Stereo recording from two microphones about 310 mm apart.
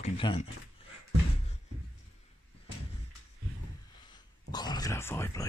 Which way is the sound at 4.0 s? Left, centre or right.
Centre.